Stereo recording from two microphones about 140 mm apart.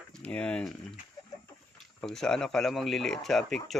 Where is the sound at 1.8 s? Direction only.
5° left (ahead or behind).